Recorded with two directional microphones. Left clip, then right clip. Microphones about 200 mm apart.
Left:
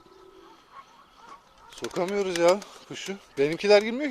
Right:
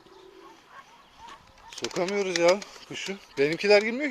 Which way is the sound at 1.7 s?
50° left (ahead or behind).